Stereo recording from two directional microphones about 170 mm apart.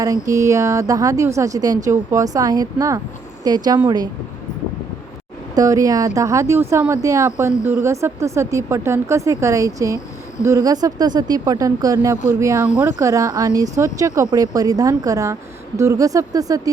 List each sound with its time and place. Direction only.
0.0 s speech: 20° right (ahead or behind)
5.5 s speech: 20° right (ahead or behind)